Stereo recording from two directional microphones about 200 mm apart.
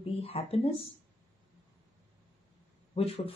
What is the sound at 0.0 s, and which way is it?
Speech, 30° left (ahead or behind).